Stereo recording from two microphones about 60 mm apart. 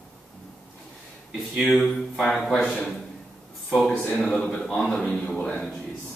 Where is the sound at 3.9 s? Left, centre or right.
Left.